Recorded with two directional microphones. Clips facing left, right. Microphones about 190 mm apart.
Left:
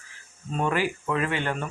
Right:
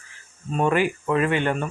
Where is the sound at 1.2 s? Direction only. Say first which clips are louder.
Right 6 dB; 20° right (ahead or behind).